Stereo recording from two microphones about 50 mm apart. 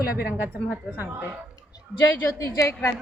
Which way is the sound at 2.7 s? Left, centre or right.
Left.